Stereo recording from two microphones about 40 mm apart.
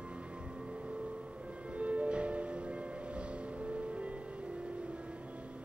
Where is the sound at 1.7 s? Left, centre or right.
Right.